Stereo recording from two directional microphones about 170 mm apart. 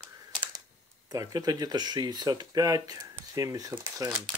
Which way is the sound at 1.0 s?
20° right (ahead or behind).